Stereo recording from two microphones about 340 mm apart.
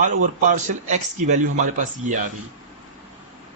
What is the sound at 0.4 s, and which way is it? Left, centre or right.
Speech, right.